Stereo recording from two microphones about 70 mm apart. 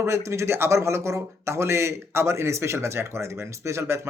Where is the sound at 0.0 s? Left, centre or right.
Right.